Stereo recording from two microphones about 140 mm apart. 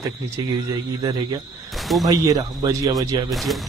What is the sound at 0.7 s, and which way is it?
Speech, 30° right (ahead or behind).